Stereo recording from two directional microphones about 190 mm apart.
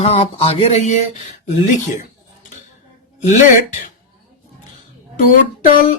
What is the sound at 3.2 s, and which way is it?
Mantra, 40° left (ahead or behind).